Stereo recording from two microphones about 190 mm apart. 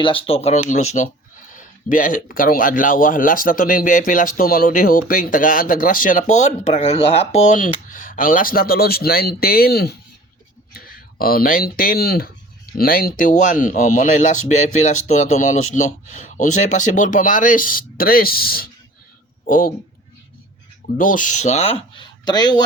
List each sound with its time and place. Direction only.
0.0 s speech: 30° left (ahead or behind); by 19.7 s 45° left (ahead or behind)
21.0 s speech: 45° left (ahead or behind); by 22.6 s 20° left (ahead or behind)